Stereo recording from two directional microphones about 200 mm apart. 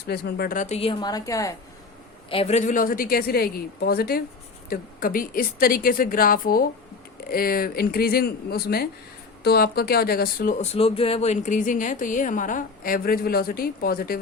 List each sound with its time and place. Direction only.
0.0 s speech: 55° left (ahead or behind); by 1.5 s 15° left (ahead or behind)
2.3 s speech: 30° left (ahead or behind); by 10.5 s 45° left (ahead or behind)
10.6 s speech: 30° left (ahead or behind); by 14.2 s 50° left (ahead or behind)